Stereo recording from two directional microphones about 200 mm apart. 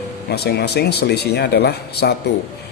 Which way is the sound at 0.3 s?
55° left (ahead or behind).